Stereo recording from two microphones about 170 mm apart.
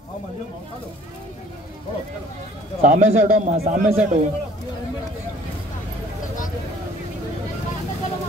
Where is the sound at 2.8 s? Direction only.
50° right (ahead or behind).